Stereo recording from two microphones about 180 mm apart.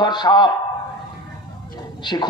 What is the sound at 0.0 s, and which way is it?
Speech, 25° left (ahead or behind).